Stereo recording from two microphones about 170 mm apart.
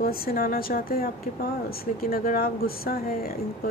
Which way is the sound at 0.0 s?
60° left (ahead or behind).